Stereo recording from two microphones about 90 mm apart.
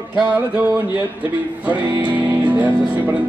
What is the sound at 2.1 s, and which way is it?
Music, 15° right (ahead or behind).